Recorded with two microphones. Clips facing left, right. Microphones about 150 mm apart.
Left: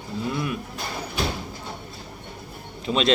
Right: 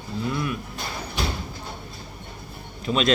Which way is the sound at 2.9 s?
25° left (ahead or behind).